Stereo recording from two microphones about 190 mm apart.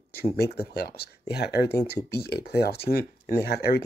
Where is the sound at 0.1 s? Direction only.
55° left (ahead or behind).